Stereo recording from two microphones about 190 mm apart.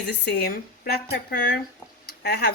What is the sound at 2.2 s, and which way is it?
Speech, 55° left (ahead or behind).